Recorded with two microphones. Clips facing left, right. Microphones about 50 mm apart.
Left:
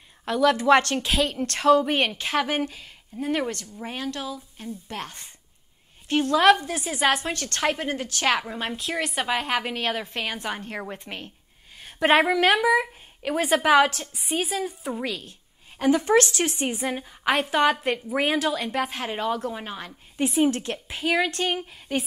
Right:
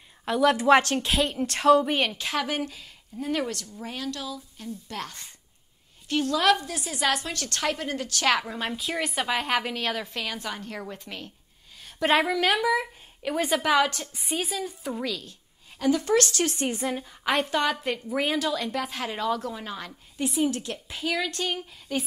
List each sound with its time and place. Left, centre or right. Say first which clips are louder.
0.2 s a woman's voice: left 1 dB; centre
2.0 s a woman's voice: left 3 dB; left
8.4 s a woman's voice: left 1 dB; centre
9.7 s a woman's voice: left 2 dB; centre
15.0 s a woman's voice: left 1 dB; left; by 17.6 s centre
17.6 s a woman's voice: left 5 dB; left
20.2 s a woman's voice: left 4 dB; left